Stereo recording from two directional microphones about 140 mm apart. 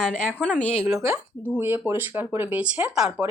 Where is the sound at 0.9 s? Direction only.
20° right (ahead or behind).